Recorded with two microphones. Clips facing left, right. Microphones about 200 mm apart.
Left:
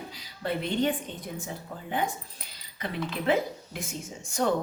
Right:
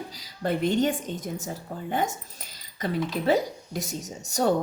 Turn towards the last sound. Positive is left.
turn(degrees=-40)  # may be behind; listen again after turning